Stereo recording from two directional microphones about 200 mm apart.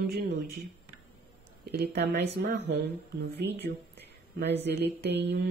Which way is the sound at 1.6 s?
55° right (ahead or behind).